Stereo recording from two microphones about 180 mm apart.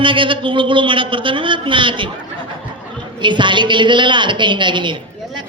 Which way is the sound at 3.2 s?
25° right (ahead or behind).